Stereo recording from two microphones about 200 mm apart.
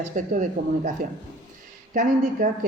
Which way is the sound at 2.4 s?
45° right (ahead or behind).